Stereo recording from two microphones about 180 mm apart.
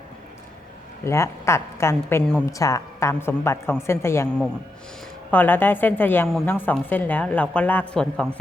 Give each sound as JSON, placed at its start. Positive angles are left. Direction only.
{"t": 1.0, "sound": "a woman's voice", "side_deg": 15}